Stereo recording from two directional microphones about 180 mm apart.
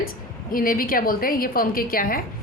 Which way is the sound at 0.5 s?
50° left (ahead or behind).